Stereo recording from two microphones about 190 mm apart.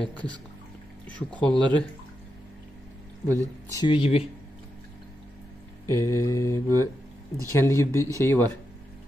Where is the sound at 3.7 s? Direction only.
25° left (ahead or behind).